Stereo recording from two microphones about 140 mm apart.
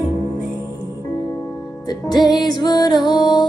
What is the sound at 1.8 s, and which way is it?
Music, 30° left (ahead or behind).